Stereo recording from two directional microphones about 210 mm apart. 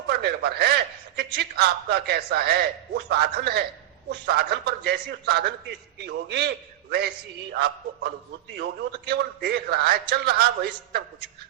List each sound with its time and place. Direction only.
0.1 s a man's voice: 50° right (ahead or behind)
7.5 s a man's voice: 50° right (ahead or behind)